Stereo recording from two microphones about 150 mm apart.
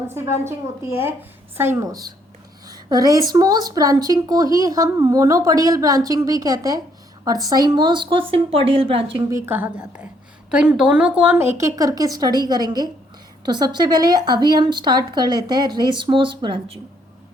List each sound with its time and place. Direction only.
0.1 s a woman's voice: 15° right (ahead or behind); by 9.2 s 35° right (ahead or behind)
9.3 s a woman's voice: 15° right (ahead or behind); by 16.7 s 35° right (ahead or behind)